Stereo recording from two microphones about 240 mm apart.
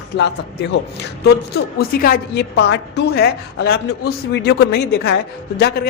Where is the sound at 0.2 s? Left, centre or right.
Left.